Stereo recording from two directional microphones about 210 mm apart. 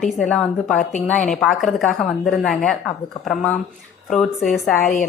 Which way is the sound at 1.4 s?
Centre (ahead or behind).